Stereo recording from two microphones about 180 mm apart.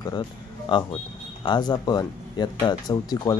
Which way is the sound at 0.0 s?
25° left (ahead or behind).